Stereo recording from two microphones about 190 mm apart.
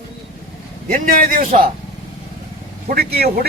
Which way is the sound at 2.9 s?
55° right (ahead or behind).